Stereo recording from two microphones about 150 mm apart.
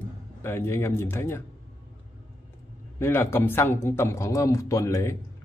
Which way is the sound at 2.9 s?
15° left (ahead or behind).